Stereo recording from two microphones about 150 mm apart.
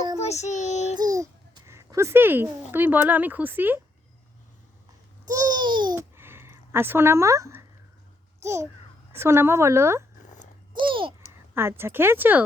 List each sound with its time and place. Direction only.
0.2 s child singing: 45° left (ahead or behind)
0.9 s a child's voice: 25° right (ahead or behind)
5.3 s babbling: 25° right (ahead or behind)
6.1 s a sound: 15° right (ahead or behind)
9.1 s speech: 15° right (ahead or behind)
10.8 s babbling: 35° right (ahead or behind)
11.5 s speech: 15° right (ahead or behind)